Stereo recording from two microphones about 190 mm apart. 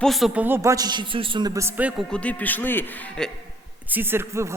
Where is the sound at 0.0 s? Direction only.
Centre (ahead or behind).